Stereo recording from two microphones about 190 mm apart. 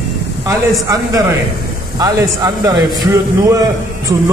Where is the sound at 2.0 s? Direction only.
20° right (ahead or behind).